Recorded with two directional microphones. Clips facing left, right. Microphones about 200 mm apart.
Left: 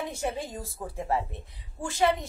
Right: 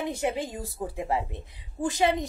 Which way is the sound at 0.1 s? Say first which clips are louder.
Right 3 dB; 15° right (ahead or behind).